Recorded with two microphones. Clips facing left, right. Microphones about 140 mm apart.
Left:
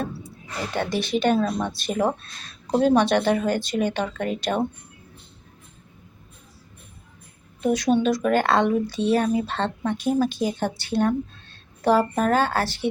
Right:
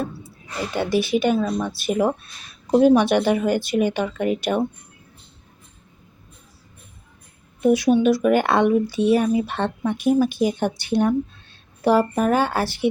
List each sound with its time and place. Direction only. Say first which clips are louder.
0.7 s speech: right 4 dB; 10° right (ahead or behind)
7.6 s a woman's voice: right 4 dB; 10° right (ahead or behind)